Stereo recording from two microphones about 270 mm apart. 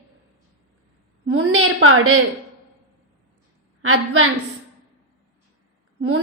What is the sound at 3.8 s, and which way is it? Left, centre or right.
Speech, right.